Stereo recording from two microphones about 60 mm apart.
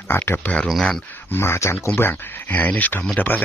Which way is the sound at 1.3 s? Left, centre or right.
Left.